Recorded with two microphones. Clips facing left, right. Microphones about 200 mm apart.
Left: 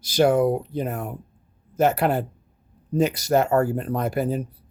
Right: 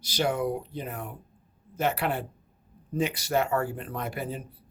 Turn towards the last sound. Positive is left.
turn(degrees=40)  # may be behind; listen again after turning